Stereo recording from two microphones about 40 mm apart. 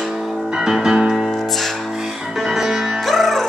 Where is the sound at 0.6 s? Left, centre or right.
Centre.